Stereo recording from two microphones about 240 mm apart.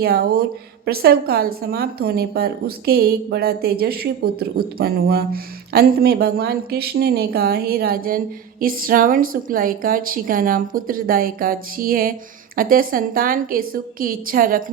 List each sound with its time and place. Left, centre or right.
0.0 s a woman's voice: right